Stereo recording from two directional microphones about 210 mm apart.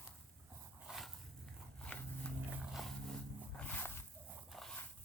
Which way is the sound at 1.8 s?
5° left (ahead or behind).